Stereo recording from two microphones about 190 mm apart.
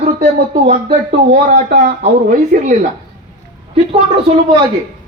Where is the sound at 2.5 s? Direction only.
45° right (ahead or behind).